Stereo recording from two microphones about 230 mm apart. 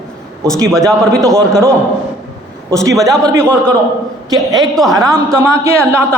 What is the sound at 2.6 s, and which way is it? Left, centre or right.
Speech, centre.